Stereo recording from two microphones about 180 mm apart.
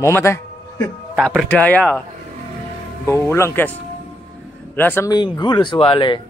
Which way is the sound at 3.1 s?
15° left (ahead or behind).